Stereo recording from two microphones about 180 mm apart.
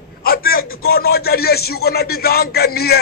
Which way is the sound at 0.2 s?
55° left (ahead or behind).